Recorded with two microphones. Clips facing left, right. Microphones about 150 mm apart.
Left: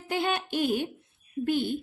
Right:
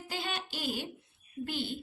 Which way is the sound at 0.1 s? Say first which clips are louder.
Left 10 dB; 55° left (ahead or behind).